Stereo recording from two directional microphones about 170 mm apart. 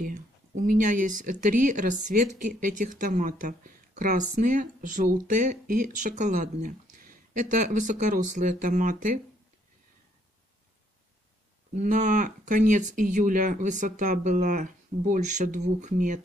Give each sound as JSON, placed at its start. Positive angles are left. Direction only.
{"t": 0.0, "sound": "speech", "side_deg": -50}
{"t": 11.7, "sound": "speech", "side_deg": -45}